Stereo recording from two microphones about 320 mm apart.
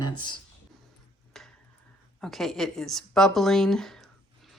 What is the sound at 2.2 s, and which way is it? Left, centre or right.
Speech, centre.